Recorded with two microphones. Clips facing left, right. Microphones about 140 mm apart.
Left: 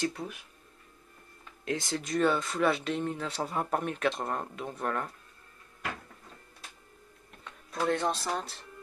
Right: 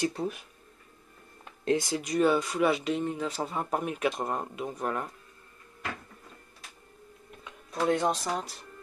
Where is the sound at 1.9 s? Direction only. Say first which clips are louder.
Even; 5° right (ahead or behind).